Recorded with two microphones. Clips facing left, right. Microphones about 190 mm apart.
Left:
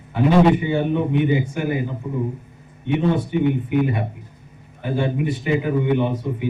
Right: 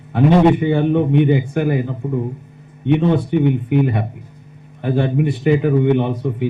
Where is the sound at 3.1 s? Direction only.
60° right (ahead or behind).